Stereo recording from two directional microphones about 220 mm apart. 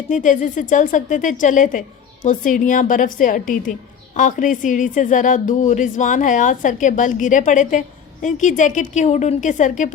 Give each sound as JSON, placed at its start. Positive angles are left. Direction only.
{"t": 0.1, "sound": "speech", "side_deg": 35}